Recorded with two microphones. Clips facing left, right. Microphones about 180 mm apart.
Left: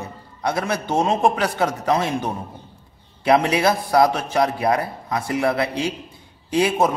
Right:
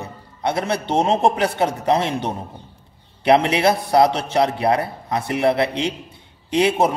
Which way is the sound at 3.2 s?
25° right (ahead or behind).